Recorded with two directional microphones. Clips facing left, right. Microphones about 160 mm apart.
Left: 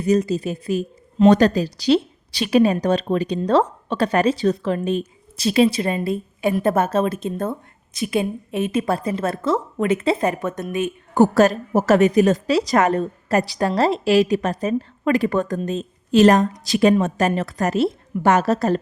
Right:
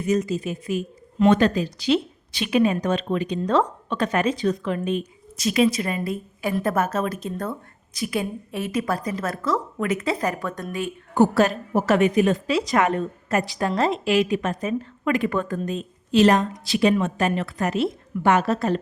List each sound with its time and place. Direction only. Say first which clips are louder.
0.0 s a woman's voice: left 4 dB; 35° left (ahead or behind); by 10.9 s 20° left (ahead or behind)
11.1 s a woman's voice: left 3 dB; 45° left (ahead or behind)
16.1 s a woman's voice: left 4 dB; 45° left (ahead or behind)